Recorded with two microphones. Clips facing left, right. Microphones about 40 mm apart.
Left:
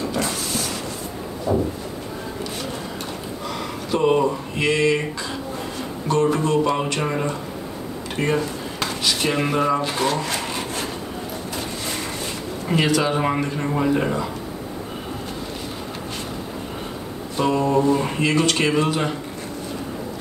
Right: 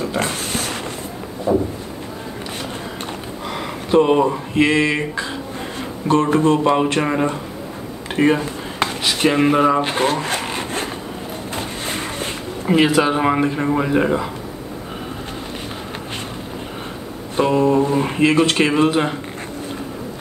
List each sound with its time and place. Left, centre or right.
0.2 s a sound: right
1.5 s speech: right
3.4 s a sound: right
4.1 s speech: right
7.0 s speech: centre
8.2 s speech: right
9.8 s zipper: right
11.5 s a sound: right
12.6 s speech: right
17.5 s speech: right